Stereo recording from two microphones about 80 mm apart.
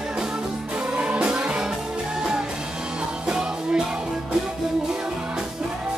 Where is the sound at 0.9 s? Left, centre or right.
Centre.